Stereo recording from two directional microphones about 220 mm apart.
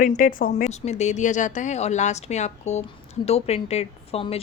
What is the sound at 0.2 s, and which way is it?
A woman's voice, 40° left (ahead or behind).